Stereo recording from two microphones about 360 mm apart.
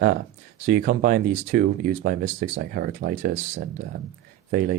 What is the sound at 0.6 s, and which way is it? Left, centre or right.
Speech, right.